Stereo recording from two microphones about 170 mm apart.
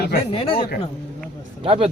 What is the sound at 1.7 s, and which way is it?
Speech, 35° right (ahead or behind).